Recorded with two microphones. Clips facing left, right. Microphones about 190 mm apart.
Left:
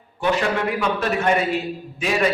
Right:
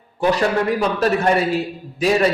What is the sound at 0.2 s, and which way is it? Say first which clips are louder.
A man's voice: right 3 dB; 35° right (ahead or behind).